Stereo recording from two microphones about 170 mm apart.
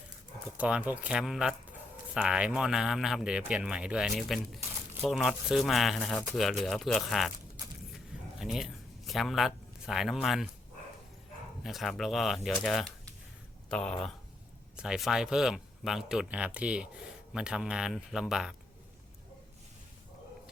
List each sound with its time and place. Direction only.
0.5 s speech: 10° right (ahead or behind)
7.9 s a sound: centre (ahead or behind)
11.6 s speech: centre (ahead or behind)